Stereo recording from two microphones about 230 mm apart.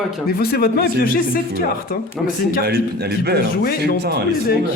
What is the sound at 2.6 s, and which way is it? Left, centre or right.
Speech, right.